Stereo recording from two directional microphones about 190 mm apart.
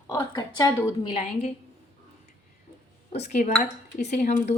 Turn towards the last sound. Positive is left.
turn(degrees=40)  # may be behind; listen again after turning